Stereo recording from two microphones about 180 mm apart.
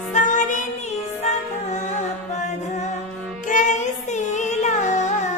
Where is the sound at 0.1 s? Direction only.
45° left (ahead or behind).